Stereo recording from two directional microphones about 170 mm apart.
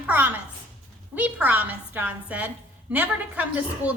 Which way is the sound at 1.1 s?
10° right (ahead or behind).